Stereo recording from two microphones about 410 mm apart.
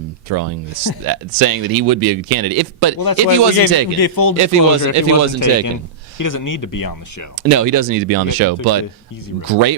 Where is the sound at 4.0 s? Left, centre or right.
Left.